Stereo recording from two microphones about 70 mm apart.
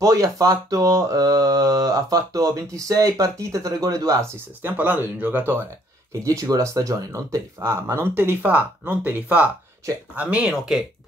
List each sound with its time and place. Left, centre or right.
0.0 s speech: right
4.6 s speech: right
6.2 s speech: right; by 10.7 s centre